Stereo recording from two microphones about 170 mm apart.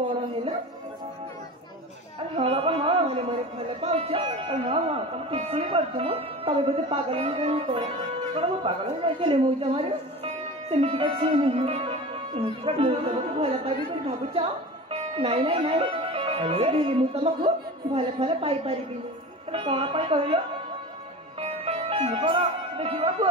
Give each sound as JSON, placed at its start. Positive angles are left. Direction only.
{"t": 2.3, "sound": "a man's voice", "side_deg": -35}
{"t": 21.4, "sound": "music", "side_deg": -35}